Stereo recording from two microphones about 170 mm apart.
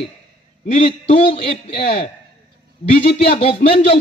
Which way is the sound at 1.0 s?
40° left (ahead or behind).